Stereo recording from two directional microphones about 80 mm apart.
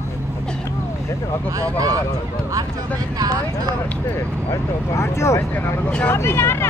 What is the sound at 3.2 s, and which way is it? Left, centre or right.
Speech, right.